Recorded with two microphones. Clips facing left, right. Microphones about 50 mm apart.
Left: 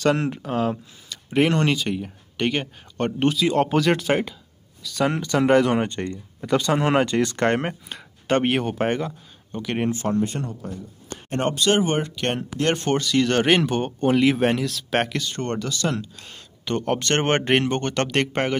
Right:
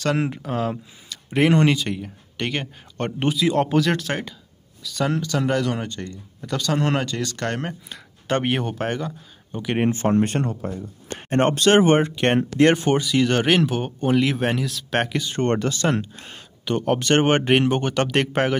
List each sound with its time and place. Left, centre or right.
0.2 s speech: centre
5.1 s speech: left
6.4 s speech: centre
8.3 s speech: centre
8.7 s speech: centre
9.5 s speech: centre
9.8 s speech: right
10.2 s speech: right
12.0 s speech: right
12.7 s speech: centre
15.3 s speech: right
16.6 s speech: centre